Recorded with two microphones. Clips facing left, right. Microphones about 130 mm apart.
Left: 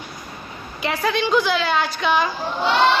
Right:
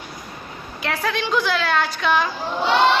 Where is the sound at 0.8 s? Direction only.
Centre (ahead or behind).